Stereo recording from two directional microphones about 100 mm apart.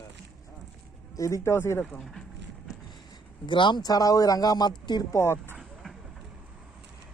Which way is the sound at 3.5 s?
50° left (ahead or behind).